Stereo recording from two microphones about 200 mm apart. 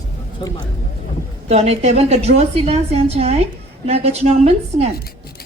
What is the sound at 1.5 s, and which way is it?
A woman's voice, 30° right (ahead or behind).